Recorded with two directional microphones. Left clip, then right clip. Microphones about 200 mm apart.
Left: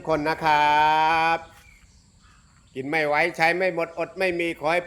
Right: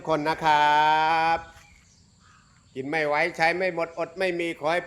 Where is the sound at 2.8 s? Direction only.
15° left (ahead or behind).